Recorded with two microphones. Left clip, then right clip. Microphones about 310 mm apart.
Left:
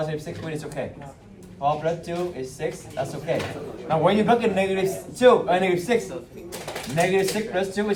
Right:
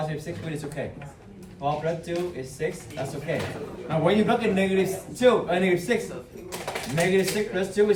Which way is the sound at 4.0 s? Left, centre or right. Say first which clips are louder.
Left 3 dB; centre.